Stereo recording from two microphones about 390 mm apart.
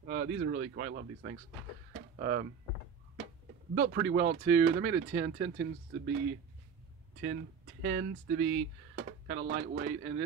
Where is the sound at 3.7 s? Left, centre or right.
Right.